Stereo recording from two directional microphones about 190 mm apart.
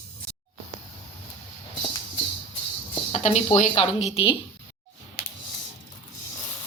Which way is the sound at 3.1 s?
35° left (ahead or behind).